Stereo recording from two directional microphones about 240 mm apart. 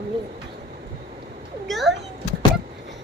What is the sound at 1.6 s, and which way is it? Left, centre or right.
Speech, centre.